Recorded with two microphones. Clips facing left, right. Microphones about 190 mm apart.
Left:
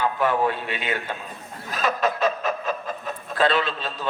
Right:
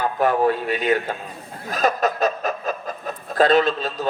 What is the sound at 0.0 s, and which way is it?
A man's voice, 40° right (ahead or behind).